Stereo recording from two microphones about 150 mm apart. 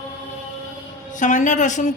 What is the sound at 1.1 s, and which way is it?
Speech, 55° left (ahead or behind).